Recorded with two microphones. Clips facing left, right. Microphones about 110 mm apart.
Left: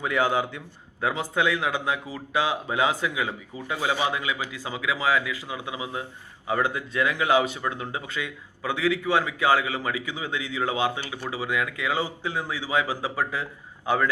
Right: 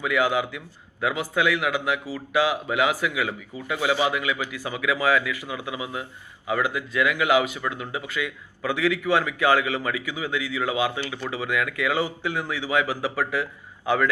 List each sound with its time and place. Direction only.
0.0 s speech: 30° left (ahead or behind)
8.6 s speech: 15° left (ahead or behind)